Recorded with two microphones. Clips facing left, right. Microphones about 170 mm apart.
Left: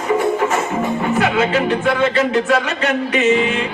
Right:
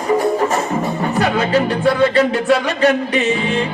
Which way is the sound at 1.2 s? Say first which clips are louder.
Right 2 dB; 35° right (ahead or behind).